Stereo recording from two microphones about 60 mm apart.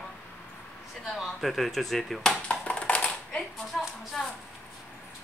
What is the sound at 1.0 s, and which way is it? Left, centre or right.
Speech, centre.